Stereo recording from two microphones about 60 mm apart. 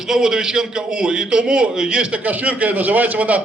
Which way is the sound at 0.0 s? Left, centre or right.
Centre.